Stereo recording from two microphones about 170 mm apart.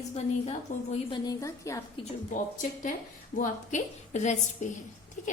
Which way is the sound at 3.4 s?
45° left (ahead or behind).